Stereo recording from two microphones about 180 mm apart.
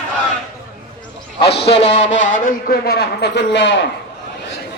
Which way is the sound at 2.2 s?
50° left (ahead or behind).